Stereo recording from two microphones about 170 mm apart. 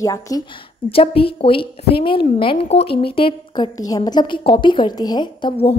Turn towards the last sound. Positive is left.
turn(degrees=30)  # may be behind; listen again after turning